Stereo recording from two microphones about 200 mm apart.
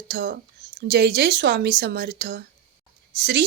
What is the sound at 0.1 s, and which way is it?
Speech, 55° right (ahead or behind).